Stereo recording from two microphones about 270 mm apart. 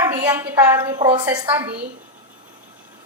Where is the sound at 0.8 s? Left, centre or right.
Centre.